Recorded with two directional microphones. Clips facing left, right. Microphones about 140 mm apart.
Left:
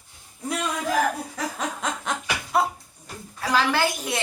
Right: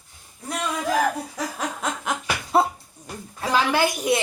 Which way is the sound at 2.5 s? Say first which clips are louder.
Right 3 dB; 30° right (ahead or behind).